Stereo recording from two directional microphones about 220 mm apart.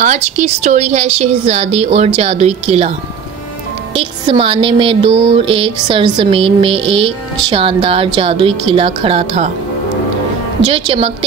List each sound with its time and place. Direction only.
0.0 s speech: 35° right (ahead or behind)
3.9 s speech: 25° right (ahead or behind)
10.7 s speech: 25° right (ahead or behind)